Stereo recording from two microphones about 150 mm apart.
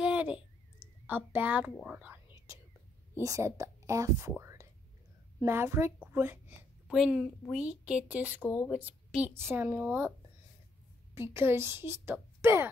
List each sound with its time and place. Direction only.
0.0 s a sound: 10° right (ahead or behind)
1.0 s a woman's voice: 10° right (ahead or behind)
2.0 s whispering: 20° right (ahead or behind)
3.2 s a woman's voice: 20° right (ahead or behind)
4.3 s whispering: 20° right (ahead or behind)
5.4 s a woman's voice: 15° right (ahead or behind)
8.4 s speech: 15° left (ahead or behind)
8.6 s a woman's voice: 10° right (ahead or behind)
11.1 s a woman's voice: 15° right (ahead or behind)